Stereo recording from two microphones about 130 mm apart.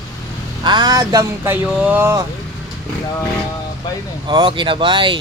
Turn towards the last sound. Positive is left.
turn(degrees=-40)  # may be behind; listen again after turning